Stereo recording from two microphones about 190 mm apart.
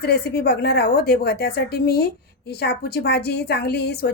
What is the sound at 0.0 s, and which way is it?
A woman's voice, 60° left (ahead or behind).